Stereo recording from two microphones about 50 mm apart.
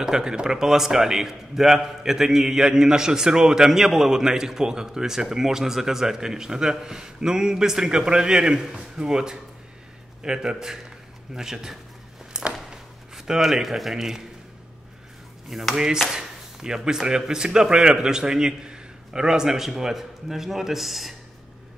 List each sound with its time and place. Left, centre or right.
0.0 s a man's voice: centre
12.3 s a sound: centre
13.1 s a man's voice: centre
15.7 s a man's voice: centre